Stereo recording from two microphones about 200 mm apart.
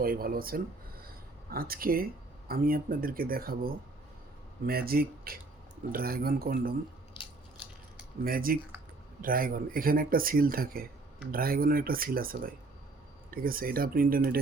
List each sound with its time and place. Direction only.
0.0 s speech: 45° right (ahead or behind)
1.0 s a sound: 50° right (ahead or behind)
2.5 s speech: 45° right (ahead or behind)
8.2 s speech: 45° right (ahead or behind)